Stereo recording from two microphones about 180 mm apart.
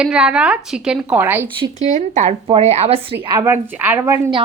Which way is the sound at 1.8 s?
40° right (ahead or behind).